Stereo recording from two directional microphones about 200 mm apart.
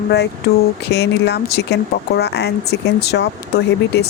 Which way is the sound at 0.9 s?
55° left (ahead or behind).